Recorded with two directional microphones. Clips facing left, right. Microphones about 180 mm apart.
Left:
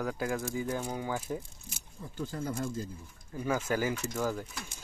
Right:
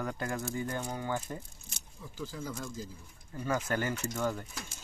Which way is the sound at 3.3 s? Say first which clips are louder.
Left 2 dB; 5° left (ahead or behind).